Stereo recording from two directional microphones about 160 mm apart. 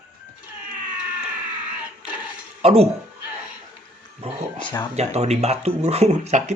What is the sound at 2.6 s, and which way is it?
Speech, 40° right (ahead or behind).